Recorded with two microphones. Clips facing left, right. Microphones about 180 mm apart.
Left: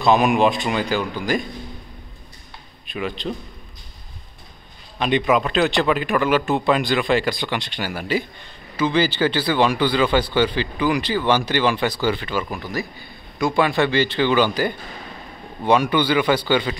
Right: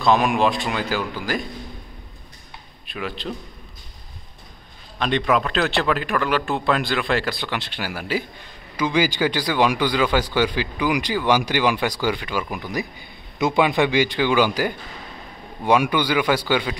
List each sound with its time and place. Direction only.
0.0 s speech: centre (ahead or behind)
2.9 s speech: centre (ahead or behind)
4.9 s speech: 5° left (ahead or behind)